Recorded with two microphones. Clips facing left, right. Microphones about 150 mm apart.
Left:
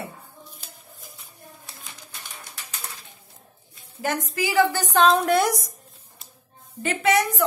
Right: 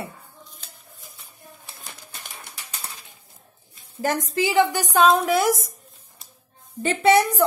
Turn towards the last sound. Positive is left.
turn(degrees=-30)  # may be behind; listen again after turning